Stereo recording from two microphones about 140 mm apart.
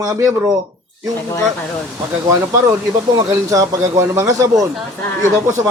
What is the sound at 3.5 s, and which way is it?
A man's voice, 25° right (ahead or behind).